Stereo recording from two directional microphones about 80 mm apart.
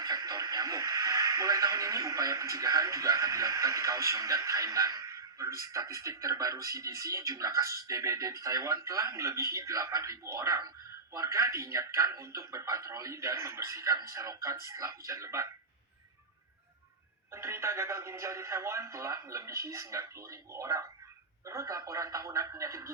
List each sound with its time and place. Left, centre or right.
0.0 s speech: right
17.3 s speech: right